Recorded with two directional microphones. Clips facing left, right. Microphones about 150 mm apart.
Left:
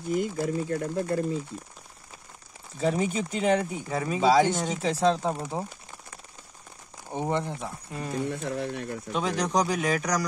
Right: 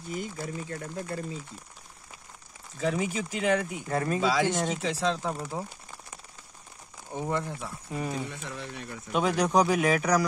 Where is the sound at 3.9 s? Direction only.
5° left (ahead or behind).